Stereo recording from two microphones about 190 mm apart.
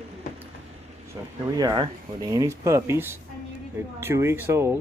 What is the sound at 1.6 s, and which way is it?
Speech, 20° right (ahead or behind).